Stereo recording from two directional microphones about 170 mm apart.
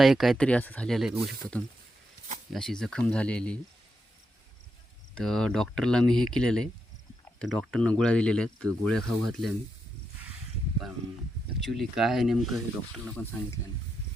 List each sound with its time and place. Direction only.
0.0 s speech: centre (ahead or behind)
5.1 s speech: 5° left (ahead or behind)
11.6 s speech: centre (ahead or behind)